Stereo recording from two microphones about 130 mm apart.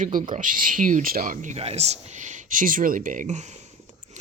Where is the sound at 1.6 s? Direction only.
55° right (ahead or behind).